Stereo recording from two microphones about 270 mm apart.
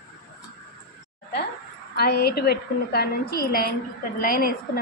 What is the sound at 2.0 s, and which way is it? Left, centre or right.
A woman's voice, left.